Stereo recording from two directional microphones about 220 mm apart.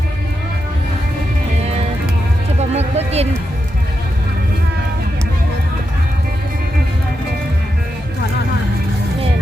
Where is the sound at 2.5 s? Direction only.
30° right (ahead or behind).